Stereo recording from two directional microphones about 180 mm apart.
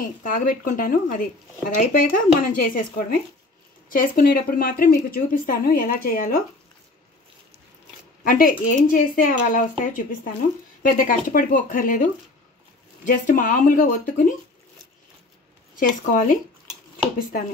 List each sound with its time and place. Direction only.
0.0 s speech: 50° left (ahead or behind)
8.2 s speech: 50° left (ahead or behind)
15.8 s speech: 50° left (ahead or behind)